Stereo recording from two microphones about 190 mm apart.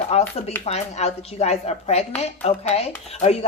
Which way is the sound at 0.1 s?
35° left (ahead or behind).